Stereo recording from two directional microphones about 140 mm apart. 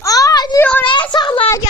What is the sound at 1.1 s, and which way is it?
Speech, 35° left (ahead or behind).